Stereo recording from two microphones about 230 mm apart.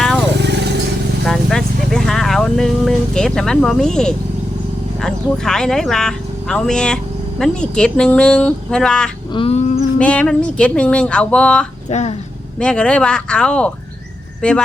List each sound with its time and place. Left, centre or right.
0.3 s vehicle: right
1.2 s vehicle: centre
5.0 s speech: centre
9.3 s bird: left
10.0 s speech: centre
11.9 s speech: left
12.5 s speech: centre